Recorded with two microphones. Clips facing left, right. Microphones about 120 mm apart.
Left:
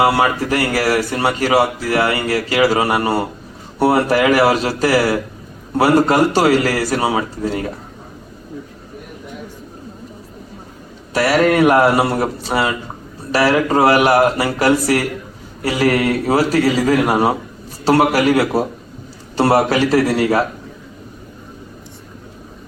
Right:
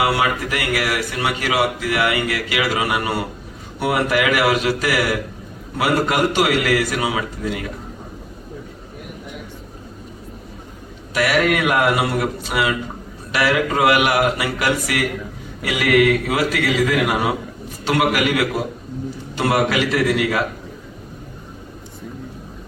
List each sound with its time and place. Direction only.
0.0 s a man's voice: 35° left (ahead or behind)
11.1 s a man's voice: 35° left (ahead or behind)